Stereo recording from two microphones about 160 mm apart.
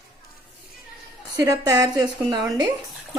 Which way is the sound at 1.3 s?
20° right (ahead or behind).